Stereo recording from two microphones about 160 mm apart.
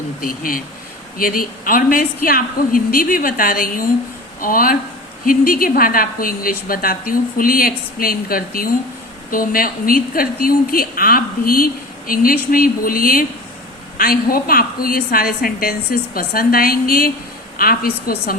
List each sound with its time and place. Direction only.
0.2 s a woman's voice: 60° left (ahead or behind)